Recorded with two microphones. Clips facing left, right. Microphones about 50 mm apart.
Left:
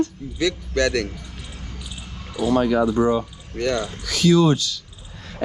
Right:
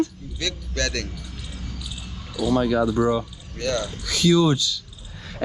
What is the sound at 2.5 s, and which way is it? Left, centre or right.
Speech, left.